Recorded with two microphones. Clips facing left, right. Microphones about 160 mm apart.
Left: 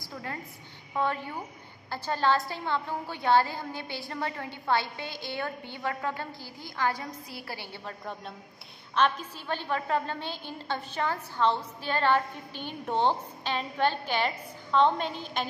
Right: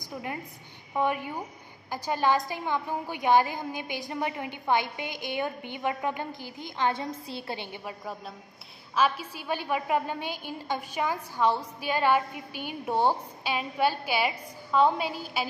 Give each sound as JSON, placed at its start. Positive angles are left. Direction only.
{"t": 0.0, "sound": "a woman's voice", "side_deg": -15}